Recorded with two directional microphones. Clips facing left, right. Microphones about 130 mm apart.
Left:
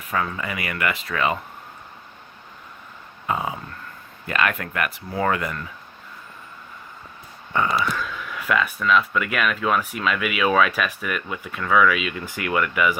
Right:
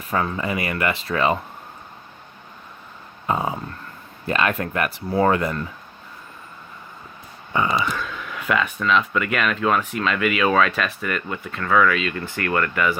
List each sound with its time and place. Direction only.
0.1 s speech: 30° right (ahead or behind)
3.2 s speech: 30° right (ahead or behind)
7.5 s speech: 5° right (ahead or behind)